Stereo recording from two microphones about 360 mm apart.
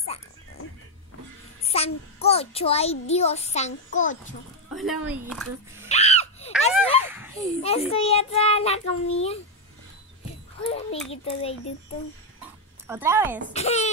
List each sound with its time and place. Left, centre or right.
1.6 s a child's voice: centre
4.7 s speech: centre
5.9 s screaming: centre
6.5 s a sound: centre
7.6 s a child's voice: centre
10.6 s a child's voice: centre
12.4 s dog: centre
13.5 s a child's voice: centre